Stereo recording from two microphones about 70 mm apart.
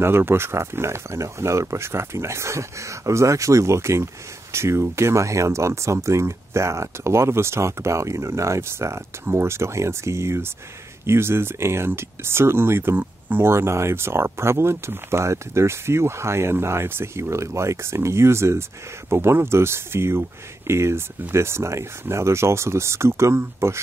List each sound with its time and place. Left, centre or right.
0.0 s speech: right